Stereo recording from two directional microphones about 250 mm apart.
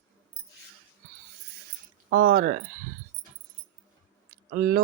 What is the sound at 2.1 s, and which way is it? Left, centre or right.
Speech, right.